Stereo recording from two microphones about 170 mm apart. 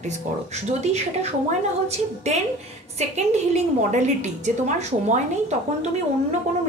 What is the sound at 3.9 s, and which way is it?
A woman's voice, 45° right (ahead or behind).